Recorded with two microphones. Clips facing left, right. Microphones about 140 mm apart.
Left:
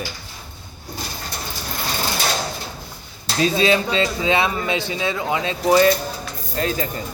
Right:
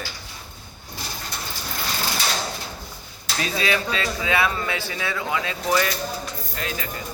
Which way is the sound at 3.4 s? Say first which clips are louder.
Left 7 dB; 25° left (ahead or behind).